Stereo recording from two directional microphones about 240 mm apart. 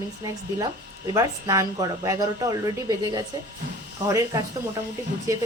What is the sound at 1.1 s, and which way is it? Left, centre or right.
Speech, centre.